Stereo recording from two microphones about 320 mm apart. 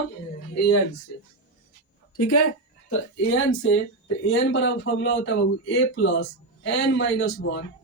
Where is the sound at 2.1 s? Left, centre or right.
Left.